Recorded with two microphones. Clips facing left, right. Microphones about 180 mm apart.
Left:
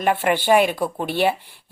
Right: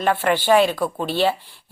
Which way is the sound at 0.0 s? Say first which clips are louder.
Even; 15° left (ahead or behind).